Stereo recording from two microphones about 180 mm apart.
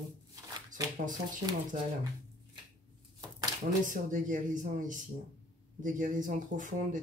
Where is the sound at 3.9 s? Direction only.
45° right (ahead or behind).